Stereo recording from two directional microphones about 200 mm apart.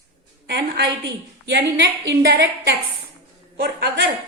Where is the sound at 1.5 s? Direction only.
55° right (ahead or behind).